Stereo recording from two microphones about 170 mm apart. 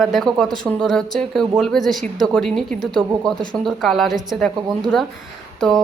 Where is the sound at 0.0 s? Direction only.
Centre (ahead or behind).